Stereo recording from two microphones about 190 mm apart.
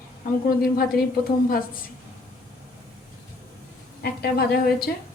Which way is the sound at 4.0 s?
55° left (ahead or behind).